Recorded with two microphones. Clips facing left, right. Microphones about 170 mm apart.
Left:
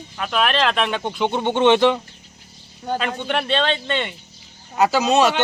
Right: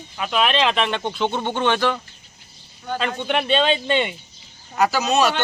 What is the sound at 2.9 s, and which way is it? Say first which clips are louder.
Speech: even; 5° left (ahead or behind).